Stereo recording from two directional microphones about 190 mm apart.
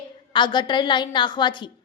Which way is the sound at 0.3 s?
25° left (ahead or behind).